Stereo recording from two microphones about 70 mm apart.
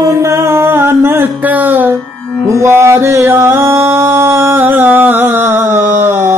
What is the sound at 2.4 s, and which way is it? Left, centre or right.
Music, right.